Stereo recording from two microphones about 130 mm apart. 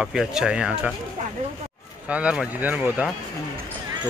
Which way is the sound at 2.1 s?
10° right (ahead or behind).